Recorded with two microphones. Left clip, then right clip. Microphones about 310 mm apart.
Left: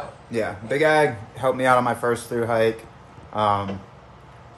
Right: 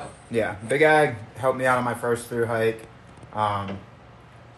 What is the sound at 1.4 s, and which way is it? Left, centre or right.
Speech, centre.